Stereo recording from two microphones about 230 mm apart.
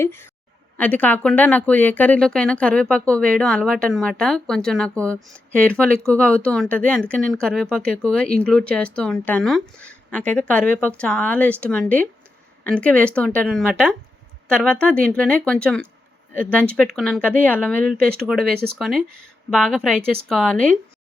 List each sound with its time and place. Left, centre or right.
0.0 s a woman's voice: centre
17.9 s speech: right
18.3 s a woman's voice: centre
18.5 s speech: right
18.8 s a woman's voice: centre